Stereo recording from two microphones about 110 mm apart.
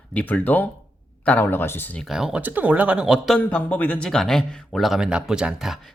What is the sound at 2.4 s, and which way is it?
Speech, 15° right (ahead or behind).